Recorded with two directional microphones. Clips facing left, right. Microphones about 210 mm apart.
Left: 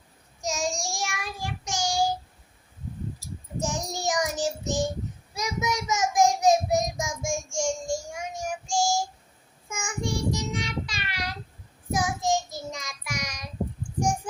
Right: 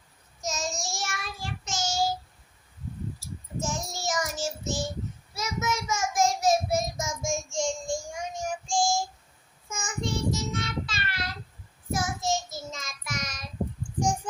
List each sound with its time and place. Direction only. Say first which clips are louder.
0.4 s child singing: left 3 dB; 15° left (ahead or behind)
3.6 s child singing: left 3 dB; 15° left (ahead or behind)